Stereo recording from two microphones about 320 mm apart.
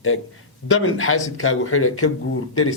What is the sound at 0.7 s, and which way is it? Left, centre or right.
A man's voice, left.